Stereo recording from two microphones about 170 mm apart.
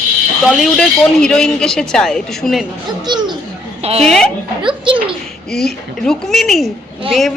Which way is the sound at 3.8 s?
35° right (ahead or behind).